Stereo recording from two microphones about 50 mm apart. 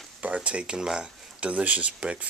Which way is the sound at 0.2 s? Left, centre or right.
Right.